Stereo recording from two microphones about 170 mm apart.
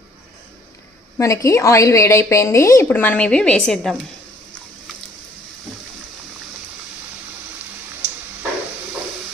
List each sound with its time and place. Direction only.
1.2 s speech: 20° left (ahead or behind)